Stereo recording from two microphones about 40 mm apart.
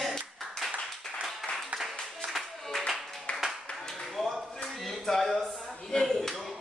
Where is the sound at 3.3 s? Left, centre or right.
Left.